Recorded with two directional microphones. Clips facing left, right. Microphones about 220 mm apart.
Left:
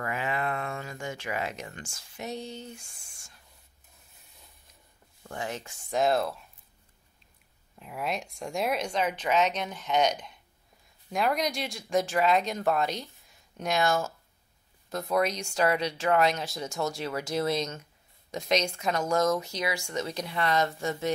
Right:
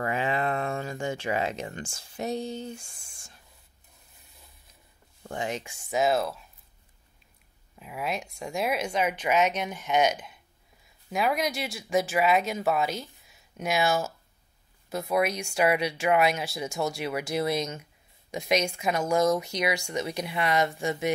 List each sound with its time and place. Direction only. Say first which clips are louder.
0.0 s a sound: right 4 dB; 30° right (ahead or behind)
5.3 s speech: right 3 dB; 20° right (ahead or behind); by 6.4 s centre (ahead or behind)
7.8 s speech: right 1 dB; centre (ahead or behind)